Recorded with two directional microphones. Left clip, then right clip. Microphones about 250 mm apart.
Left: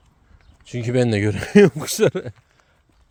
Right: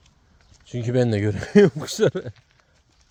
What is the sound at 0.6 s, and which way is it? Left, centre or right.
Speech, left.